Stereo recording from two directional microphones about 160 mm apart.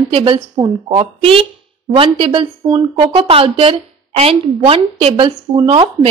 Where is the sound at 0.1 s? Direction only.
35° right (ahead or behind).